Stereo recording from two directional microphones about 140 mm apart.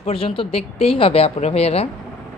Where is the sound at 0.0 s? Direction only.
40° left (ahead or behind).